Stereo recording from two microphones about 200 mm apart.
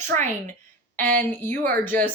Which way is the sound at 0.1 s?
15° left (ahead or behind).